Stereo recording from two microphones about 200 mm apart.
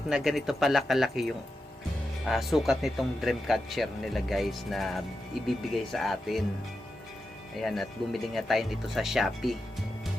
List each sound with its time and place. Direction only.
0.1 s speech: centre (ahead or behind)
7.6 s speech: centre (ahead or behind)